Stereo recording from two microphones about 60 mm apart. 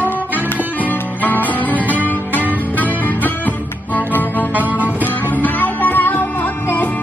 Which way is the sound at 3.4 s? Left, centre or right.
Left.